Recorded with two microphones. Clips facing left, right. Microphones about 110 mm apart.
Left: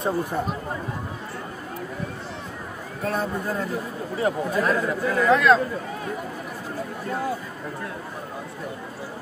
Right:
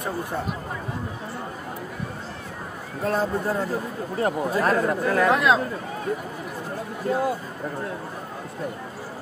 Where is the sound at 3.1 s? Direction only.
30° right (ahead or behind); by 5.3 s 50° right (ahead or behind).